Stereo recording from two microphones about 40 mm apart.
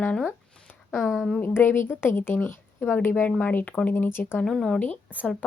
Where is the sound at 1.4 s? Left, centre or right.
Left.